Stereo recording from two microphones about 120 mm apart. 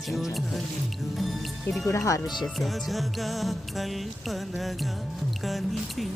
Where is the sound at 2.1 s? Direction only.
25° left (ahead or behind).